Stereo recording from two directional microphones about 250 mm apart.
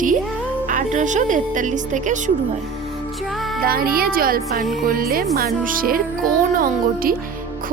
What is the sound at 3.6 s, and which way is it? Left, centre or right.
Speech, right.